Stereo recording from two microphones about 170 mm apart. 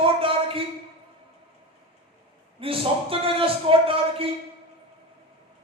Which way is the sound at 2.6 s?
30° right (ahead or behind).